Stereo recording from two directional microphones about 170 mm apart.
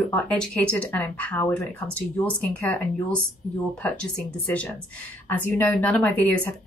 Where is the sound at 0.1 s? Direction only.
5° left (ahead or behind).